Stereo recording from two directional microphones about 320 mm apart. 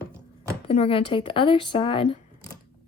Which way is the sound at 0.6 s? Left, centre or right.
Centre.